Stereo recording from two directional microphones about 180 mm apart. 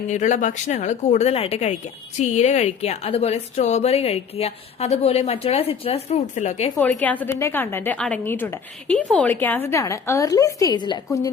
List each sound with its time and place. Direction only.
0.1 s speech: 40° left (ahead or behind)
7.0 s a woman's voice: 10° left (ahead or behind)